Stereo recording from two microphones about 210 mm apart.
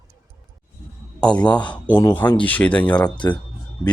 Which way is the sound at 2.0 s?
15° left (ahead or behind).